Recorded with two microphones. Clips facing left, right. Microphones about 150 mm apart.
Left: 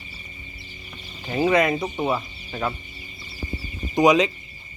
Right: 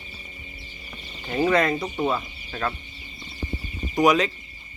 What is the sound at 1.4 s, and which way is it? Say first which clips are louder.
Speech: left 1 dB; 15° left (ahead or behind).